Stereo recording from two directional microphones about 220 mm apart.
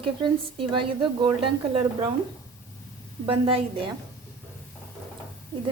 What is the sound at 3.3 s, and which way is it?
Speech, 25° right (ahead or behind).